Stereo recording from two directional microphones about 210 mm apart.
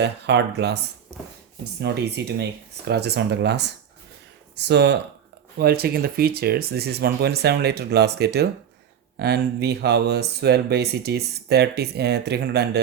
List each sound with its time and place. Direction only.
0.0 s speech: 55° right (ahead or behind)
1.8 s speech: 50° right (ahead or behind)